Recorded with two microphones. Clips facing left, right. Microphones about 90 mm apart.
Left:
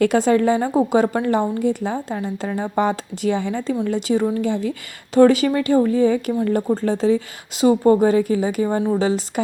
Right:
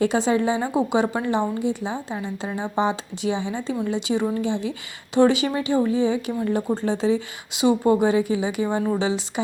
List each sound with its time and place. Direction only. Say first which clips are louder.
0.0 s a woman's voice: left 4 dB; 55° left (ahead or behind)